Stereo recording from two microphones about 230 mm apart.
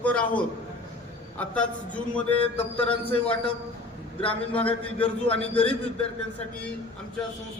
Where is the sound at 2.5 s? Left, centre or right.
Left.